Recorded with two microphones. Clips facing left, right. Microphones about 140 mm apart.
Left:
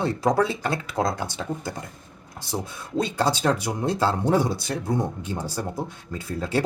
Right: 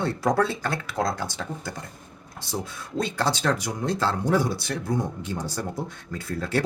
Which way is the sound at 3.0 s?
15° left (ahead or behind).